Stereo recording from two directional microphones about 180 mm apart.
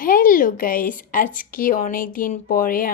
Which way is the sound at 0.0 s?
50° left (ahead or behind).